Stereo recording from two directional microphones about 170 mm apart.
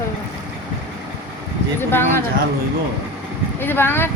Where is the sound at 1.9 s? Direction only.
15° left (ahead or behind).